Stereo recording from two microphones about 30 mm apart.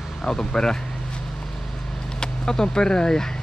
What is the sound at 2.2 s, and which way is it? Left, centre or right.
Speech, left.